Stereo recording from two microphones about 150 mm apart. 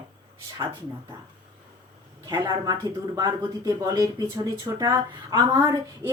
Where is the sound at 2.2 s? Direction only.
25° right (ahead or behind).